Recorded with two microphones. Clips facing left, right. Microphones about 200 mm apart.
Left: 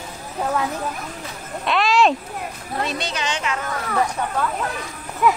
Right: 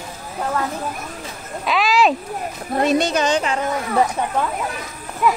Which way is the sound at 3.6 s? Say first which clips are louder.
Right 4 dB; 20° right (ahead or behind).